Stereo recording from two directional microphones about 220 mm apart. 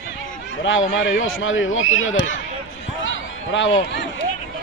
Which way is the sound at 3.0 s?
60° left (ahead or behind).